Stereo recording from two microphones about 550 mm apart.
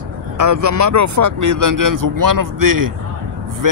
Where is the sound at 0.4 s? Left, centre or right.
Right.